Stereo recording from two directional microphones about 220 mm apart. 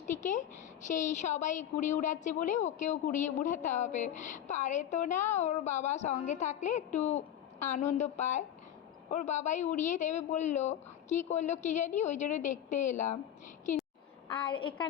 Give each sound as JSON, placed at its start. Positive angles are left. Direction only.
{"t": 0.1, "sound": "a woman's voice", "side_deg": 35}
{"t": 14.3, "sound": "a woman's voice", "side_deg": 20}